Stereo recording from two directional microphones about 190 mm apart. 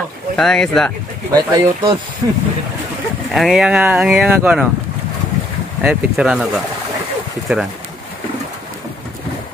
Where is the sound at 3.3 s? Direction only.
Centre (ahead or behind).